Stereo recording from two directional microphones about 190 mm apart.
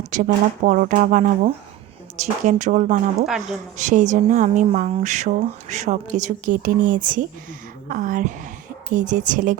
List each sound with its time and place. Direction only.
0.1 s speech: 45° right (ahead or behind)
3.2 s a woman's voice: centre (ahead or behind)
3.8 s speech: 40° right (ahead or behind)